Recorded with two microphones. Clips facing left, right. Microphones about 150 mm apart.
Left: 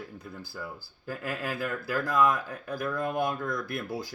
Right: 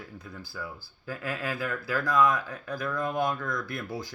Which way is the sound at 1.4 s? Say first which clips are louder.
Even; 50° left (ahead or behind).